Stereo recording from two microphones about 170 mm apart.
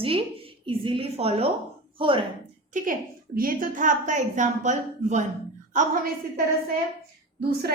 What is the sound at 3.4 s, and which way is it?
A woman's voice, 50° right (ahead or behind).